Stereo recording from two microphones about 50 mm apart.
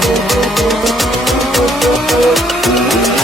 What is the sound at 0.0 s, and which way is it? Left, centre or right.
Music, centre.